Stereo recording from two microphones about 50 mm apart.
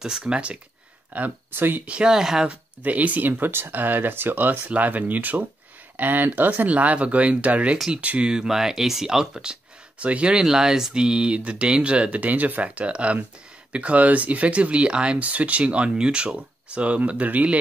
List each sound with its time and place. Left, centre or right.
0.2 s speech: right
1.1 s speech: right
1.5 s speech: right
1.9 s speech: centre
2.8 s speech: right
4.5 s speech: right
8.3 s speech: centre
10.4 s speech: centre; by 17.6 s right